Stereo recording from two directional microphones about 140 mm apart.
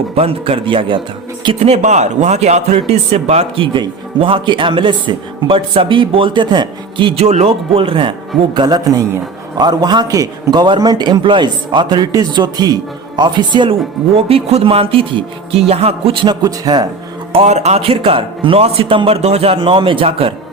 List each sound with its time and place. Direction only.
0.2 s a man's voice: 40° right (ahead or behind)
1.5 s a man's voice: 50° right (ahead or behind)
8.5 s a man's voice: 30° right (ahead or behind)
17.3 s a man's voice: 50° right (ahead or behind)